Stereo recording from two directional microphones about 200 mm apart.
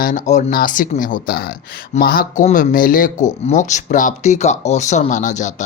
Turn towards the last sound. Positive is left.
turn(degrees=35)  # may be behind; listen again after turning